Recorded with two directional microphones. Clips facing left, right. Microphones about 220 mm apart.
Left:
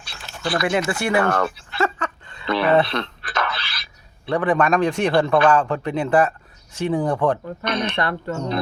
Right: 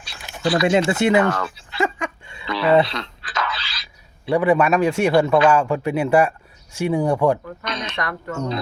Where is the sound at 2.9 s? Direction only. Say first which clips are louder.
Left 3 dB; 55° left (ahead or behind).